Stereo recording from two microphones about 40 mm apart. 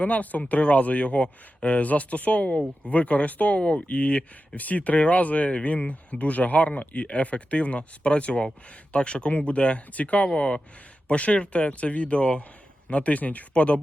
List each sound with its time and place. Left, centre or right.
0.0 s speech: left